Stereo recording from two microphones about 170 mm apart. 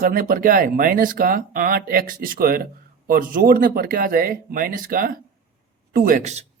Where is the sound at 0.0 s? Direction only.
55° right (ahead or behind).